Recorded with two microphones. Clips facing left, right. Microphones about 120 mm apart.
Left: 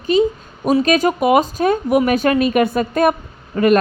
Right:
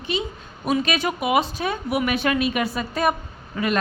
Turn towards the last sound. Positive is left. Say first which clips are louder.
# left 11 dB
turn(degrees=50)  # may be behind; listen again after turning